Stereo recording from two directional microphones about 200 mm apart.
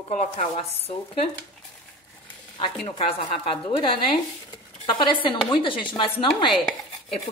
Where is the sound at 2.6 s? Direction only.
25° left (ahead or behind).